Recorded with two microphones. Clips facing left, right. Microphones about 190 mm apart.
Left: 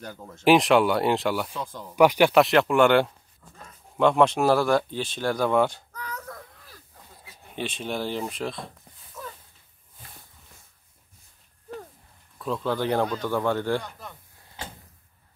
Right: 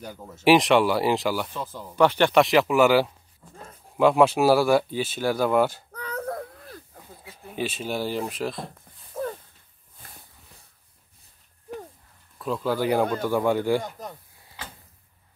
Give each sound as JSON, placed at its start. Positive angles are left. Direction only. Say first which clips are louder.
{"t": 0.0, "sound": "speech", "louder": "right 1 dB", "side_deg": -10}
{"t": 2.0, "sound": "speech", "louder": "left 1 dB", "side_deg": 10}
{"t": 5.9, "sound": "a sound", "louder": "right 7 dB", "side_deg": -60}
{"t": 7.5, "sound": "speech", "louder": "right 2 dB", "side_deg": -5}
{"t": 9.1, "sound": "a sound", "louder": "right 10 dB", "side_deg": -50}
{"t": 12.4, "sound": "speech", "louder": "right 1 dB", "side_deg": 0}
{"t": 13.7, "sound": "speech", "louder": "right 3 dB", "side_deg": -40}